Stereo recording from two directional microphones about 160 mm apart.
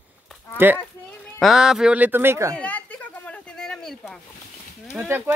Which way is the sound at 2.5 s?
10° left (ahead or behind).